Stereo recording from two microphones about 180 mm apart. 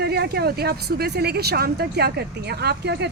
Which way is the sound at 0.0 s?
65° right (ahead or behind).